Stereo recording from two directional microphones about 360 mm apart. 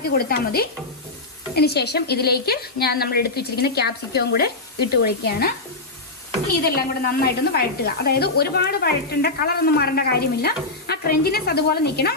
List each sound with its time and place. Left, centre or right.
0.1 s a woman's voice: left
6.7 s a woman's voice: left